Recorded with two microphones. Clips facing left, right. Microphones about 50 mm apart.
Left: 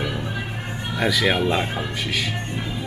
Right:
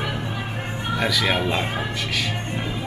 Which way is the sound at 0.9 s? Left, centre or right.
Centre.